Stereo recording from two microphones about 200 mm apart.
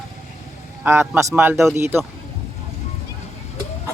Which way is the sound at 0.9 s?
10° right (ahead or behind).